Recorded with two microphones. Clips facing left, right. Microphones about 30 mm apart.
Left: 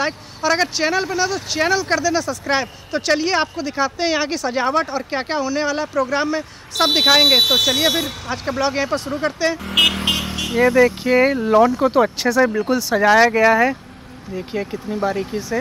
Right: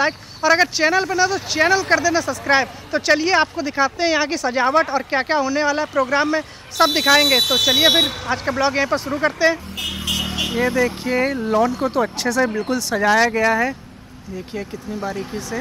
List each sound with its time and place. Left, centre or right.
0.0 s speech: centre
5.9 s speech: centre
6.3 s speech: centre
7.9 s speech: centre
8.5 s speech: centre
9.7 s speech: left
10.5 s speech: centre